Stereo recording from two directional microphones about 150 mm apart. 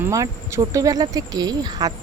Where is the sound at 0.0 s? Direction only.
20° right (ahead or behind).